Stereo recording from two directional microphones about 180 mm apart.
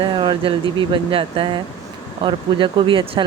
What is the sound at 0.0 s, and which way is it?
Speech, 25° right (ahead or behind).